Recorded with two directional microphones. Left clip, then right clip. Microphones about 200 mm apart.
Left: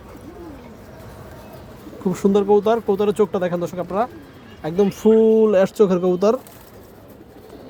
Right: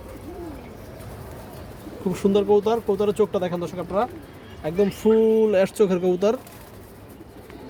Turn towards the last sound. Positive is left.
turn(degrees=15)  # may be behind; listen again after turning